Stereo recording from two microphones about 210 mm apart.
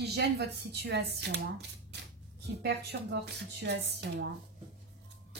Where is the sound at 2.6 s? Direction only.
50° right (ahead or behind).